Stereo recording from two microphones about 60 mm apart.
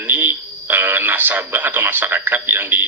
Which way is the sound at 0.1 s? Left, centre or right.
Right.